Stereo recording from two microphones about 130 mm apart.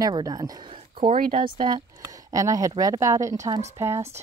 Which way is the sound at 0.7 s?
45° right (ahead or behind).